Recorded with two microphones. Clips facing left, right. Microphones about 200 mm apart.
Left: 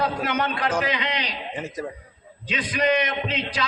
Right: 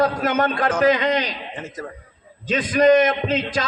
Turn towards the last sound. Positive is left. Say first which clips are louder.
# right 5 dB
turn(degrees=-45)  # may be behind; listen again after turning